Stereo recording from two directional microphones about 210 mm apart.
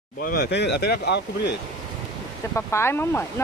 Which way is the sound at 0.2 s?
45° left (ahead or behind).